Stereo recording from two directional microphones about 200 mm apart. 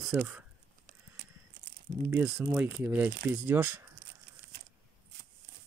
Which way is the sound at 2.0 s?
10° right (ahead or behind).